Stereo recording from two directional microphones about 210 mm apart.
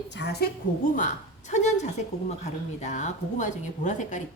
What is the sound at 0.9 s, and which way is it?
A woman's voice, 35° left (ahead or behind).